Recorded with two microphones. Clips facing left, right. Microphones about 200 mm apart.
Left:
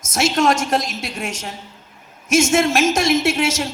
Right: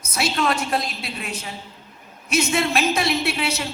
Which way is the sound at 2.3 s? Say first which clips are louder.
Left 6 dB; 45° left (ahead or behind).